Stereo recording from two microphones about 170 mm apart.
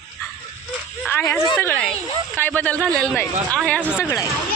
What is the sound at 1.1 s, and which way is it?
Speech, 15° left (ahead or behind).